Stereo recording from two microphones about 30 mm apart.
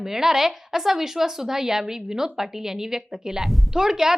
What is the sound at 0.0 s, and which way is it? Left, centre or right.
A woman's voice, centre.